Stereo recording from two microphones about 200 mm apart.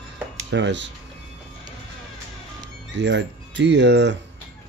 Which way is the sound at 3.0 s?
65° right (ahead or behind).